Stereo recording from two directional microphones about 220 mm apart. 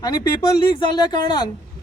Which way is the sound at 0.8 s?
20° left (ahead or behind).